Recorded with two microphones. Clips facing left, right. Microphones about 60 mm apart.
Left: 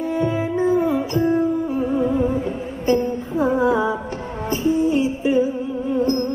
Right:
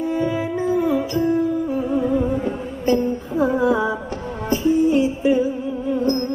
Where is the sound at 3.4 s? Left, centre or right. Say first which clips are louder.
Left 1 dB; left.